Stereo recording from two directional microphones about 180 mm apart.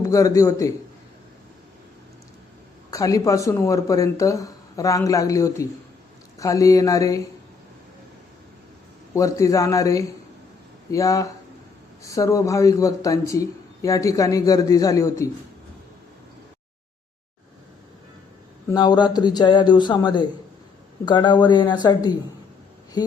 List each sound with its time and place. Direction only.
0.0 s speech: 20° left (ahead or behind)
2.9 s speech: 20° left (ahead or behind)
9.1 s speech: 15° left (ahead or behind)
18.7 s speech: 25° left (ahead or behind)